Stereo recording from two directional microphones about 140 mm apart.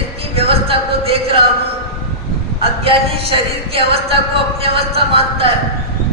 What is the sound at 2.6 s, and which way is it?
Speech, 45° right (ahead or behind).